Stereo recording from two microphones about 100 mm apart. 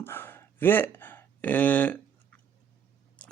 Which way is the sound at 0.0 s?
20° left (ahead or behind).